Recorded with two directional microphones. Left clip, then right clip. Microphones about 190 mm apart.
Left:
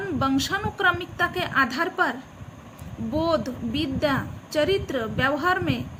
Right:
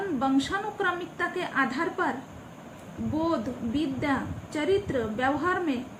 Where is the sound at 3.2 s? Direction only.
65° left (ahead or behind).